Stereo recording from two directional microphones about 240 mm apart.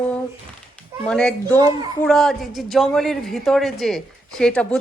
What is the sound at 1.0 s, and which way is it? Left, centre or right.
A woman's voice, centre.